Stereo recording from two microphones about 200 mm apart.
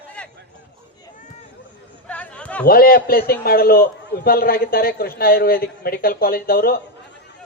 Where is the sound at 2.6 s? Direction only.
50° left (ahead or behind).